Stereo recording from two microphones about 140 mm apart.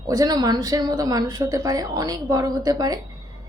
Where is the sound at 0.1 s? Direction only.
25° right (ahead or behind).